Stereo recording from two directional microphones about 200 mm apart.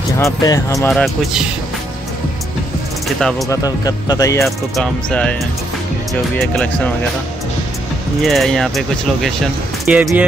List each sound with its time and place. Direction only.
0.2 s speech: 15° left (ahead or behind)
0.8 s speech: centre (ahead or behind)
3.2 s speech: centre (ahead or behind)
3.4 s speech: 20° left (ahead or behind)
4.5 s speech: 5° left (ahead or behind)
6.3 s speech: 5° left (ahead or behind)
8.2 s speech: centre (ahead or behind)